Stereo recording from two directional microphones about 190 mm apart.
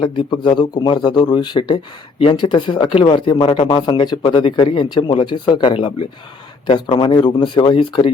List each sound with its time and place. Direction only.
0.0 s a man's voice: 25° left (ahead or behind)